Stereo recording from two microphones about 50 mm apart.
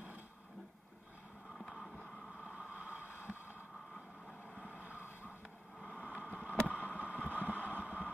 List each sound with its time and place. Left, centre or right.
2.7 s vehicle: right
4.6 s vehicle: right
4.9 s a sound: left
5.9 s vehicle: right
6.8 s vehicle: left
7.2 s vehicle: right